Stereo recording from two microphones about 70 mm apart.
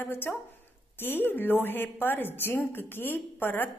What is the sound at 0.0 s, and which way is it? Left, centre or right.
A woman's voice, left.